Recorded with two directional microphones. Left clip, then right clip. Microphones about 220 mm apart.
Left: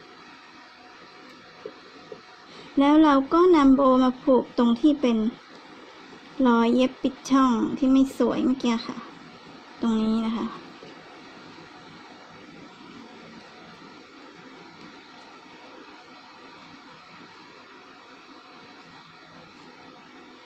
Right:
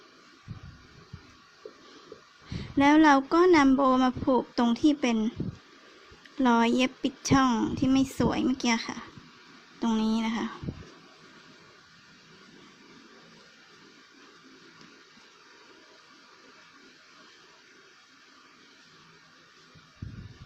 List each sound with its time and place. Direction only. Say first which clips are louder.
2.7 s speech: left 2 dB; 20° right (ahead or behind)
6.4 s speech: left 3 dB; 20° right (ahead or behind)